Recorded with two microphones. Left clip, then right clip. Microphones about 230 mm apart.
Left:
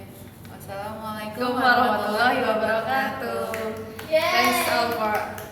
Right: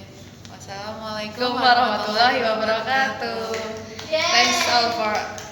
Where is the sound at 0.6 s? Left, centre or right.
Centre.